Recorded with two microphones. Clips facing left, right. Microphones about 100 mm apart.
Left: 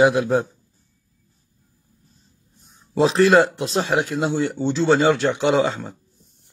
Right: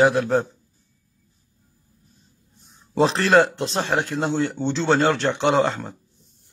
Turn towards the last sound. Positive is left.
turn(degrees=0)  # may be behind; listen again after turning